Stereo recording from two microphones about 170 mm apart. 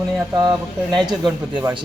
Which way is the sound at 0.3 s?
20° right (ahead or behind).